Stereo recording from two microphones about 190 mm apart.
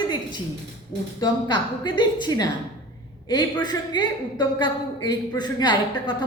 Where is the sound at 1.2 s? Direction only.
20° left (ahead or behind).